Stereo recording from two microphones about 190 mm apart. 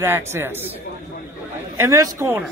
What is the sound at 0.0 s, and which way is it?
Speech, 15° right (ahead or behind).